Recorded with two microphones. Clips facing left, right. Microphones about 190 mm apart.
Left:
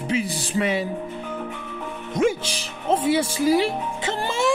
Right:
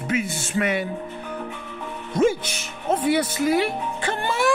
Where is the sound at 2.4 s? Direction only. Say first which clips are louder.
Left 2 dB; 30° left (ahead or behind).